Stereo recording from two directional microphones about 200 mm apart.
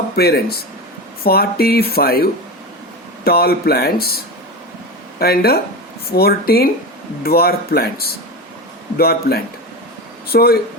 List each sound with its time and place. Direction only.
0.2 s speech: 50° left (ahead or behind)
5.2 s speech: 50° left (ahead or behind)